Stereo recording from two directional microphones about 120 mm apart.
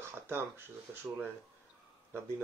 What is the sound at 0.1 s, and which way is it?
Speech, 20° right (ahead or behind).